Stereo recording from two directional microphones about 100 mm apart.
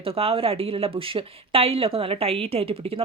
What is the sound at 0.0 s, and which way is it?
A woman's voice, 75° right (ahead or behind).